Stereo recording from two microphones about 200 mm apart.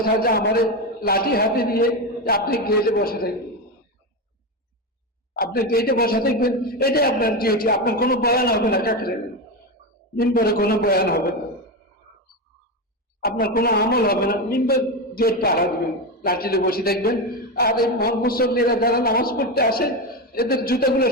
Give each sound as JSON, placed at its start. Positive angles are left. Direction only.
{"t": 0.0, "sound": "a man's voice", "side_deg": 50}
{"t": 5.4, "sound": "a man's voice", "side_deg": 50}
{"t": 10.2, "sound": "a man's voice", "side_deg": 50}
{"t": 13.2, "sound": "a man's voice", "side_deg": 50}